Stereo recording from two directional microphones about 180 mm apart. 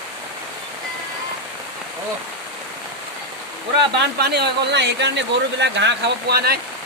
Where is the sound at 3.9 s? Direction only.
70° right (ahead or behind).